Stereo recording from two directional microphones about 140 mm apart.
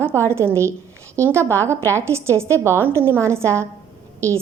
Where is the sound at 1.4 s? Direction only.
15° left (ahead or behind).